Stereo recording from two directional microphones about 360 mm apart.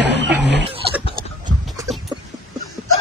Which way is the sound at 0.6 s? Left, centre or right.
Centre.